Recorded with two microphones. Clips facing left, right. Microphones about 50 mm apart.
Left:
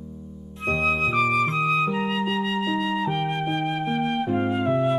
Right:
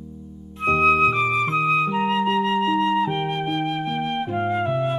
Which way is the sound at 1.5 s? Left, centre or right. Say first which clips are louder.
Right 2 dB; centre.